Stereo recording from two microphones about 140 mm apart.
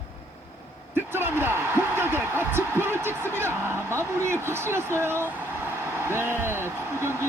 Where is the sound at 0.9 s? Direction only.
15° right (ahead or behind).